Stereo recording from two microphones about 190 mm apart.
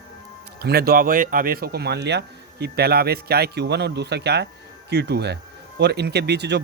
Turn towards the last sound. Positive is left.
turn(degrees=-60)  # may be behind; listen again after turning